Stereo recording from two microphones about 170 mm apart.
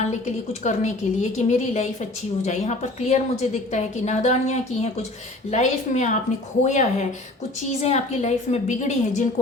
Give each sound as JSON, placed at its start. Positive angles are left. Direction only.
{"t": 0.0, "sound": "a woman's voice", "side_deg": 45}